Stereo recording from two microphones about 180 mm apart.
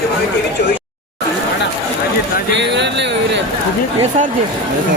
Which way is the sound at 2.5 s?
75° right (ahead or behind).